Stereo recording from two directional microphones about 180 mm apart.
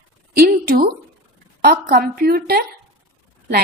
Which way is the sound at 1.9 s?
60° right (ahead or behind).